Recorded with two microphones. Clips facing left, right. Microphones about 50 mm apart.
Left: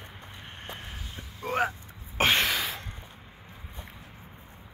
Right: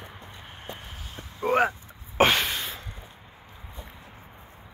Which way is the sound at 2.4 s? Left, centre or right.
Left.